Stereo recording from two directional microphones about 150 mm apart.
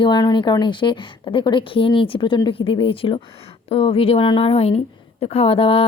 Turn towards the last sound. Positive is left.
turn(degrees=40)  # may be behind; listen again after turning